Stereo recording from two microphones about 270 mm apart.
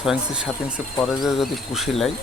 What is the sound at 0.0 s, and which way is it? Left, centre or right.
Speech, centre.